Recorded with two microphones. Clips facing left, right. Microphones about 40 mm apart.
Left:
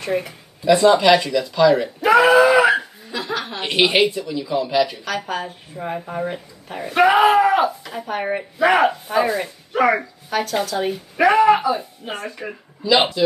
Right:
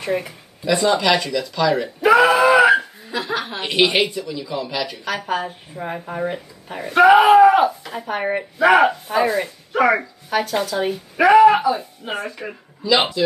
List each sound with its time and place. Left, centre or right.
0.0 s a woman's voice: centre
2.0 s chuckle: centre
3.6 s a woman's voice: centre
5.0 s a woman's voice: centre